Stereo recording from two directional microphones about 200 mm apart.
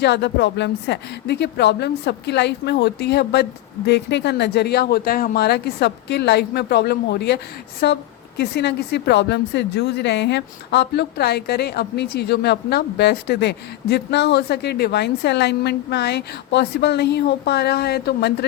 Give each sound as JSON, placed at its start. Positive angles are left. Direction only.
{"t": 0.0, "sound": "a woman's voice", "side_deg": 60}